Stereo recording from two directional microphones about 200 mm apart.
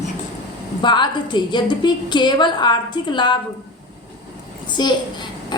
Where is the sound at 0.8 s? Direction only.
25° left (ahead or behind).